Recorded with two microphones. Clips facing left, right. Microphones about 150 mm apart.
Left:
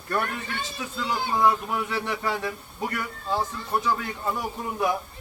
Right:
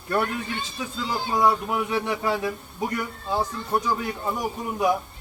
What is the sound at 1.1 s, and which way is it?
A man's voice, 10° right (ahead or behind).